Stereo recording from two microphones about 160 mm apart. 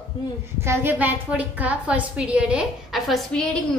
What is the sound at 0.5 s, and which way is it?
A woman's voice, 15° right (ahead or behind).